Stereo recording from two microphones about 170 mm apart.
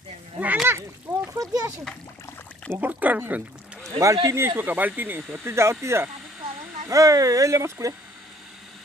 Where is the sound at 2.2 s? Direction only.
15° left (ahead or behind).